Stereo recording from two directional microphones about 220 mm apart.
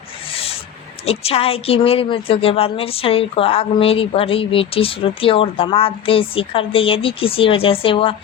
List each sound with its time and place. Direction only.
1.0 s a woman's voice: 25° left (ahead or behind)